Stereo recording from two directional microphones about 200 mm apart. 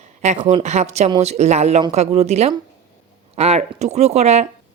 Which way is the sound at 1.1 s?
30° right (ahead or behind).